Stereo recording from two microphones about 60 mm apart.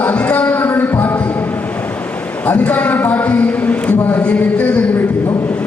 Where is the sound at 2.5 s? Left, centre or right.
Left.